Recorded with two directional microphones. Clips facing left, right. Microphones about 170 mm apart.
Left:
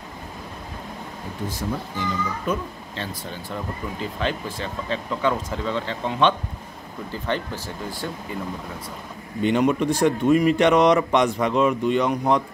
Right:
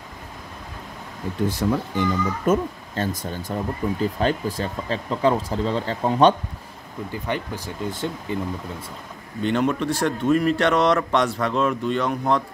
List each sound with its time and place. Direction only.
1.6 s speech: 75° right (ahead or behind)
2.0 s a child's voice: 45° right (ahead or behind)
7.2 s speech: 15° right (ahead or behind)
9.4 s a man's voice: 10° left (ahead or behind)